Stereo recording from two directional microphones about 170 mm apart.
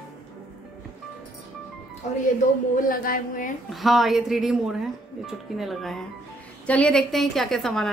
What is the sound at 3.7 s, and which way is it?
A woman's voice, centre (ahead or behind).